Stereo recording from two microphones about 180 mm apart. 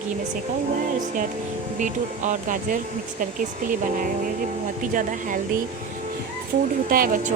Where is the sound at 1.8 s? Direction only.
45° right (ahead or behind).